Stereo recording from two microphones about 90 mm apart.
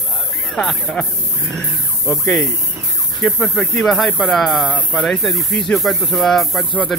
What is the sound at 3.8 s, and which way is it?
Speech, 5° left (ahead or behind).